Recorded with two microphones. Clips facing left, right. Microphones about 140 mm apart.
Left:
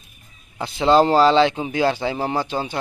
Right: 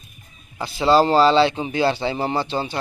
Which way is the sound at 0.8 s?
5° right (ahead or behind).